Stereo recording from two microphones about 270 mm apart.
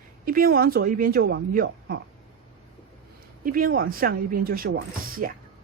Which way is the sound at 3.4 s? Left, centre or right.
Right.